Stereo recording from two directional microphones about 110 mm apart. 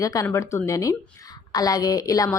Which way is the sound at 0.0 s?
30° left (ahead or behind).